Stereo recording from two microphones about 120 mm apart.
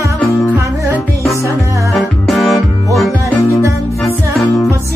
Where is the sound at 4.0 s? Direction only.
Centre (ahead or behind).